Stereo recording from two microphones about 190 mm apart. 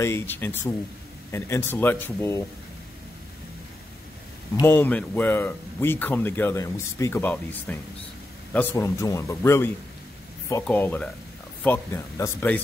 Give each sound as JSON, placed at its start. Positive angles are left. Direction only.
{"t": 0.0, "sound": "a man's voice", "side_deg": 10}
{"t": 4.6, "sound": "a man's voice", "side_deg": 10}